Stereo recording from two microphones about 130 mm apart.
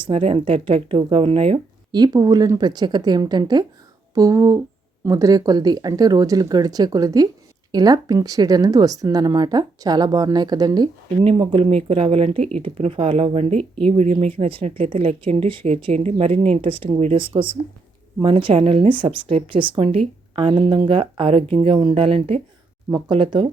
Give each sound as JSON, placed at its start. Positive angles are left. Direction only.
{"t": 0.0, "sound": "speech", "side_deg": -45}
{"t": 1.9, "sound": "a woman's voice", "side_deg": -30}
{"t": 11.2, "sound": "speech", "side_deg": -45}
{"t": 15.6, "sound": "a woman's voice", "side_deg": -55}